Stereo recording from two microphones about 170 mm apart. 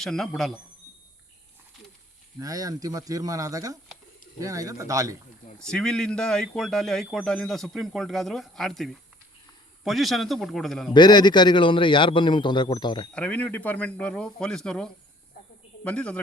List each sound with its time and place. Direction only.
0.0 s speech: 5° left (ahead or behind)
2.4 s speech: 20° right (ahead or behind)
5.5 s speech: 5° left (ahead or behind)
10.9 s a man's voice: 25° left (ahead or behind)
13.1 s speech: 10° left (ahead or behind)